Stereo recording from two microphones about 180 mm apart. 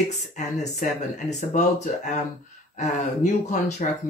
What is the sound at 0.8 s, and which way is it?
Speech, 45° left (ahead or behind).